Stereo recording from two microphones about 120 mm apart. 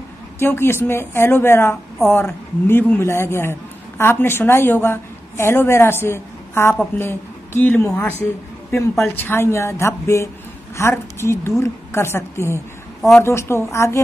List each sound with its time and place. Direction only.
0.4 s a woman's voice: 20° left (ahead or behind)